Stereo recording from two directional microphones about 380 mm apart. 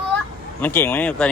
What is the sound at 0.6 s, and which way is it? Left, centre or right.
Speech, centre.